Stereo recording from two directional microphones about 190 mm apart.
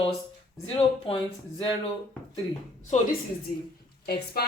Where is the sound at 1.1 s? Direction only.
30° left (ahead or behind).